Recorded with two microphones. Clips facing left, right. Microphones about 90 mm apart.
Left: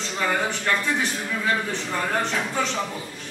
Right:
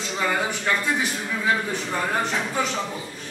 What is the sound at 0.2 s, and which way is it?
A man's voice, 5° right (ahead or behind).